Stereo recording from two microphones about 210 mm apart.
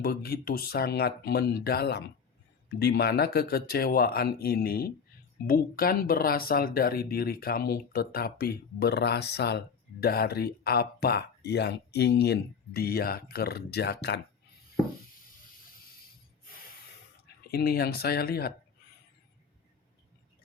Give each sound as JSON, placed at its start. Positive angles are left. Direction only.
{"t": 0.0, "sound": "speech", "side_deg": 50}
{"t": 17.5, "sound": "speech", "side_deg": 45}